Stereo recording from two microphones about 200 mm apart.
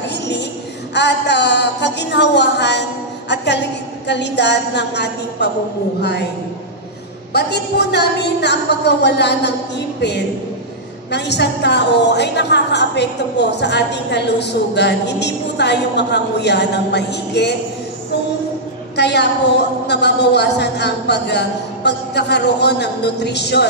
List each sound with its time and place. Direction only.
0.1 s a sound: 60° left (ahead or behind)
0.9 s a woman's voice: 60° left (ahead or behind)
7.3 s a woman's voice: 55° left (ahead or behind)
18.9 s a woman's voice: 55° left (ahead or behind)